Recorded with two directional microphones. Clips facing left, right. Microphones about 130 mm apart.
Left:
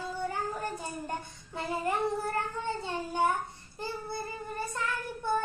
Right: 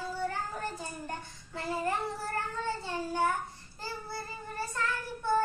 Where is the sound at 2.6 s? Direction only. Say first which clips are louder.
Even; 20° left (ahead or behind).